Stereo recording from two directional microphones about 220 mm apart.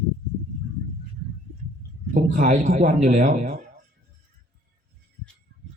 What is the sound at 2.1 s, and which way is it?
A man's voice, 35° right (ahead or behind).